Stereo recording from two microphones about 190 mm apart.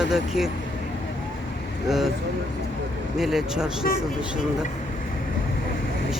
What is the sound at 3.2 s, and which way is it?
Speech, centre (ahead or behind).